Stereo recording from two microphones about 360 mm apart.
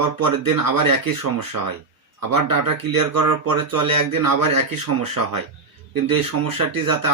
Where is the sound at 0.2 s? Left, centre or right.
Right.